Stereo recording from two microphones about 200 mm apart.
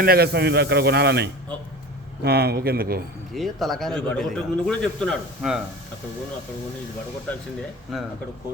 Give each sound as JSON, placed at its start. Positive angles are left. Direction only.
{"t": 0.0, "sound": "speech", "side_deg": -50}
{"t": 3.3, "sound": "a man's voice", "side_deg": 0}